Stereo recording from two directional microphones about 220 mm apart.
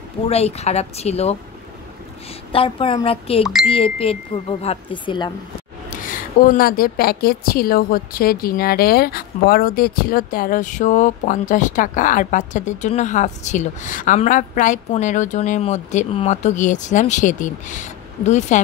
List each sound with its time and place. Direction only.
0.3 s speech: 30° left (ahead or behind)
2.5 s speech: 25° left (ahead or behind)
5.9 s a woman's voice: 35° left (ahead or behind)